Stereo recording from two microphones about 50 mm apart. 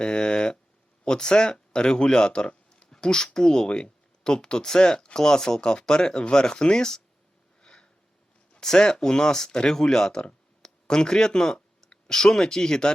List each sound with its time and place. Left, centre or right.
0.0 s speech: centre
7.6 s sniff: centre
8.5 s speech: centre